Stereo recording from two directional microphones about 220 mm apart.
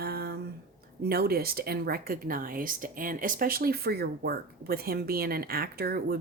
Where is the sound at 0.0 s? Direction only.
45° right (ahead or behind).